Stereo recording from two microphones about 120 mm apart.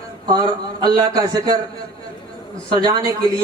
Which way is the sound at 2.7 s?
35° right (ahead or behind).